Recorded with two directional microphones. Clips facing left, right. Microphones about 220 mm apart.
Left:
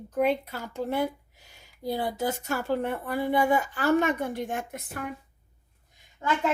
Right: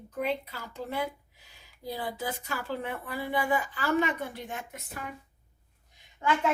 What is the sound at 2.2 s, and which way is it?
A woman's voice, 45° left (ahead or behind).